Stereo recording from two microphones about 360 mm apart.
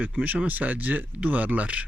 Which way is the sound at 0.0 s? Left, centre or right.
Centre.